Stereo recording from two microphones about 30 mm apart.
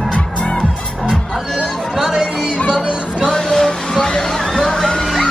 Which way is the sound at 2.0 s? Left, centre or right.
Right.